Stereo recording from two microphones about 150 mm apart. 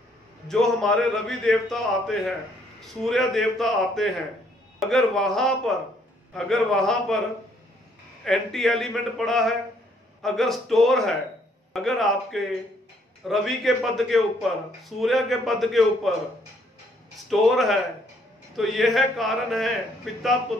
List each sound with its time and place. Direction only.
0.5 s a man's voice: 5° left (ahead or behind)
8.2 s a man's voice: centre (ahead or behind)
17.3 s a man's voice: centre (ahead or behind)